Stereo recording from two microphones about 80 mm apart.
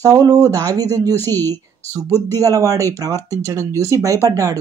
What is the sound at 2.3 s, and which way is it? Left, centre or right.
A woman's voice, right.